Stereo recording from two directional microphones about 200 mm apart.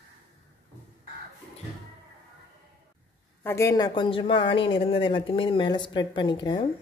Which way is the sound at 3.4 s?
15° left (ahead or behind).